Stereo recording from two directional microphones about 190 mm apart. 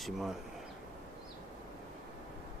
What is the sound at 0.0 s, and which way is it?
Speech, centre (ahead or behind).